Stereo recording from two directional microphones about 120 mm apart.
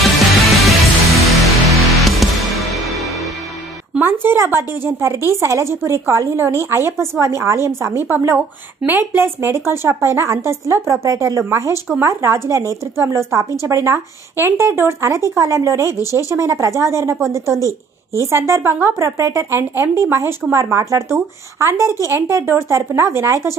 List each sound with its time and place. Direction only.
0.3 s music: centre (ahead or behind)
4.0 s a sound: 15° right (ahead or behind)
4.8 s speech: 20° right (ahead or behind)
16.2 s speech: 30° left (ahead or behind)
16.4 s speech: 25° right (ahead or behind)
17.6 s speech: 25° left (ahead or behind)
18.2 s speech: 25° right (ahead or behind)